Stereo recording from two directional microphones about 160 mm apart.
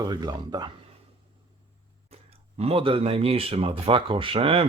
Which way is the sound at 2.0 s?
40° right (ahead or behind).